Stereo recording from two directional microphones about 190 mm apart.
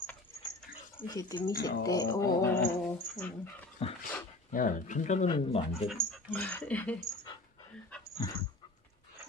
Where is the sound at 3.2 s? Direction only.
10° left (ahead or behind).